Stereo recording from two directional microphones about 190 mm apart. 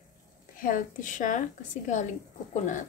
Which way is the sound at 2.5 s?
40° left (ahead or behind).